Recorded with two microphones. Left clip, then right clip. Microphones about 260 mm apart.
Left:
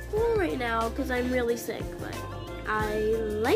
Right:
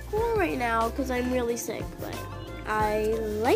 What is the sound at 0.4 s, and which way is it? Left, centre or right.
Music, right.